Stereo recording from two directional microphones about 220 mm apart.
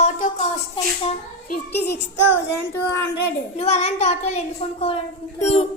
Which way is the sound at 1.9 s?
55° left (ahead or behind).